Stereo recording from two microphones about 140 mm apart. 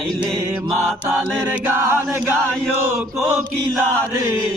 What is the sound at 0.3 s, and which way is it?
Mantra, centre (ahead or behind).